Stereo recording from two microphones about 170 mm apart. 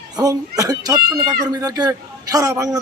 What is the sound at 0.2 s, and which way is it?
Speech, 20° right (ahead or behind).